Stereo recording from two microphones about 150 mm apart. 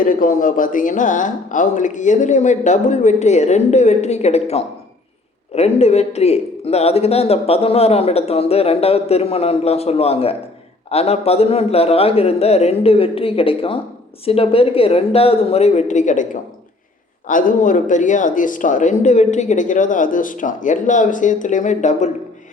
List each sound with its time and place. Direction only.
0.0 s a man's voice: 65° left (ahead or behind)